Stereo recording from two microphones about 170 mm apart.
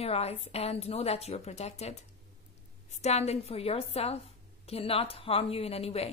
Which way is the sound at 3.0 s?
40° left (ahead or behind).